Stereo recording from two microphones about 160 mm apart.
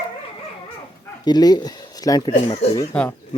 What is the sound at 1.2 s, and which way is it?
Speech, 25° left (ahead or behind).